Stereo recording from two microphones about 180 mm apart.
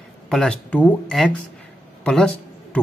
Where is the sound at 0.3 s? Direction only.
5° left (ahead or behind).